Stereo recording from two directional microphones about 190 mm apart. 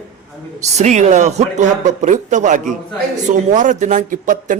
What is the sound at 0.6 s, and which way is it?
Speech, 40° right (ahead or behind).